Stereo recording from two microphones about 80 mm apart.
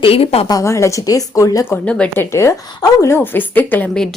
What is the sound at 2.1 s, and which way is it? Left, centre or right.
A woman's voice, left.